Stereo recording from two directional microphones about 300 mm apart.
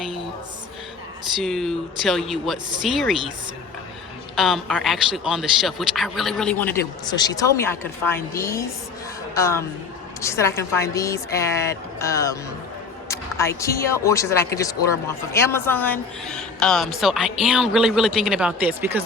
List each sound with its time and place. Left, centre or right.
1.4 s speech: centre
4.4 s a woman's voice: centre